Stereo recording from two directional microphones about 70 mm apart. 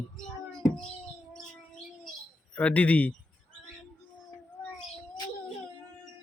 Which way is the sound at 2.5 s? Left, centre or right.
Left.